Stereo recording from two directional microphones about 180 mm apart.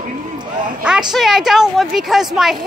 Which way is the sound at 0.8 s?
5° right (ahead or behind).